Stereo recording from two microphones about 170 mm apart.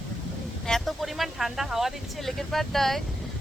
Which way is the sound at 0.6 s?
Centre (ahead or behind).